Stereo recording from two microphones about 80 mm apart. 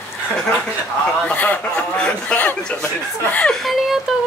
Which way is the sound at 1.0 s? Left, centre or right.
Centre.